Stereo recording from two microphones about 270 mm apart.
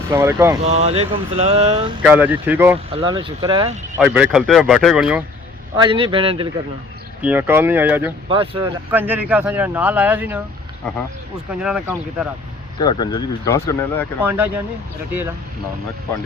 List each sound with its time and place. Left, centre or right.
0.1 s speech: centre
0.6 s speech: right
2.0 s speech: centre
2.9 s speech: centre
5.7 s speech: centre
7.2 s speech: centre
8.3 s speech: centre
8.9 s speech: centre
11.6 s speech: centre
12.8 s speech: centre
14.2 s speech: centre